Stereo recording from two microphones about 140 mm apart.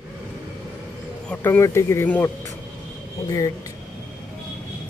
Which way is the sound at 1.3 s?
15° left (ahead or behind).